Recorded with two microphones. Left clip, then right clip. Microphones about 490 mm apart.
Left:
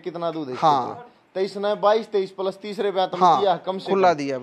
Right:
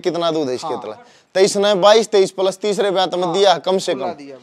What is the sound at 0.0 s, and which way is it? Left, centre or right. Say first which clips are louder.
Speech: right 9 dB; right.